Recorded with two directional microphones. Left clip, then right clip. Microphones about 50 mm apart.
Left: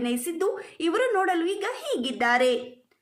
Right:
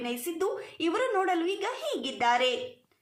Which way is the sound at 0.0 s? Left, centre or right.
Left.